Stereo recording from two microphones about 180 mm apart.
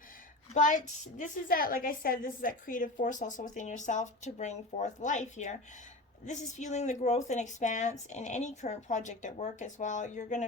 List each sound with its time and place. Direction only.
0.5 s a woman's voice: 45° left (ahead or behind)